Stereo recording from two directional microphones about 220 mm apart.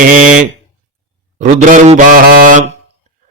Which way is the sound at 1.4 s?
35° right (ahead or behind).